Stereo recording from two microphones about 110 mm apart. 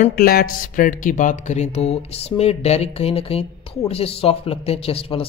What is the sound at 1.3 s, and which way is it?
Speech, 90° left.